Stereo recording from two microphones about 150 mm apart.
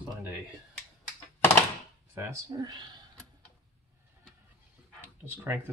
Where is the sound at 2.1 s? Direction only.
15° right (ahead or behind).